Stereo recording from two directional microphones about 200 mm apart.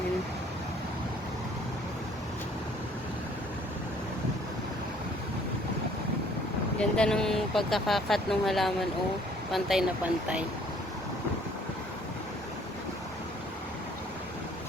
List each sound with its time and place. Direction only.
6.7 s speech: 5° left (ahead or behind)